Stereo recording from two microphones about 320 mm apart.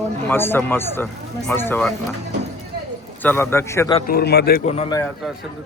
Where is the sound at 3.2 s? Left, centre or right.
Centre.